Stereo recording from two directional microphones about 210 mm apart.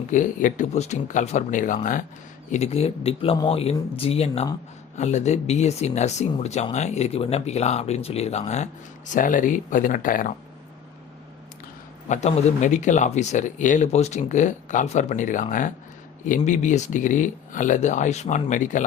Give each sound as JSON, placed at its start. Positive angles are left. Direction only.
{"t": 0.1, "sound": "speech", "side_deg": 35}
{"t": 12.0, "sound": "speech", "side_deg": 35}